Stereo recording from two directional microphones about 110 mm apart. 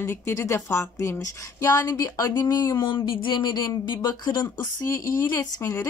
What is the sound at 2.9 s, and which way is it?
A woman's voice, 50° left (ahead or behind).